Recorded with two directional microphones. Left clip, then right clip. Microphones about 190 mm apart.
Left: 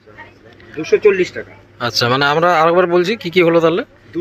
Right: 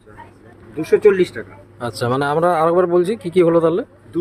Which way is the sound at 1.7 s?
10° right (ahead or behind).